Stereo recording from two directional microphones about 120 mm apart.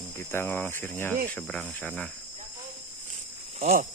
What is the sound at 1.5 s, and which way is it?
Speech, 5° left (ahead or behind).